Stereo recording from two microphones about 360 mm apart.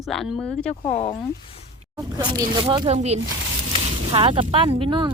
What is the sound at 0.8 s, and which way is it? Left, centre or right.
Speech, centre.